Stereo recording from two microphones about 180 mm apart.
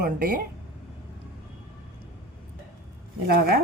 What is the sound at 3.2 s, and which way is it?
Speech, 60° right (ahead or behind).